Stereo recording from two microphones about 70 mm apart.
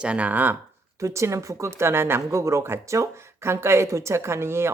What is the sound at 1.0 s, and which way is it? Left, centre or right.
Speech, right.